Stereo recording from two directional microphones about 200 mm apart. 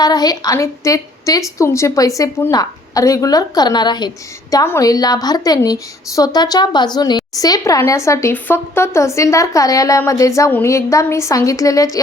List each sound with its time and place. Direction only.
0.0 s a woman's voice: 20° left (ahead or behind)